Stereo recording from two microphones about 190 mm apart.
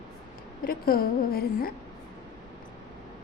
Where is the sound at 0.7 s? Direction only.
50° left (ahead or behind).